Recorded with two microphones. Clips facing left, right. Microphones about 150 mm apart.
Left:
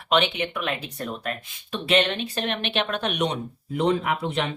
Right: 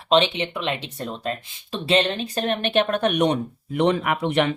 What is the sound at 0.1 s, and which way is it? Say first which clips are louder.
Speech: right 3 dB; 30° right (ahead or behind).